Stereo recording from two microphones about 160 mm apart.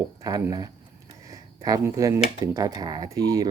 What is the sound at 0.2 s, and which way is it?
Speech, 20° right (ahead or behind).